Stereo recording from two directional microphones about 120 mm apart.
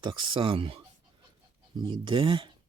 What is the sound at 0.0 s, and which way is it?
Speech, 45° right (ahead or behind).